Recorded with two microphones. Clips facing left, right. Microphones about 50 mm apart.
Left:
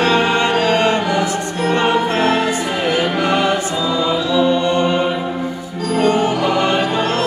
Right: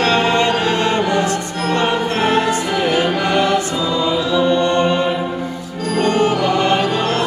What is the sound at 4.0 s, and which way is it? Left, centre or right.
Choir, centre.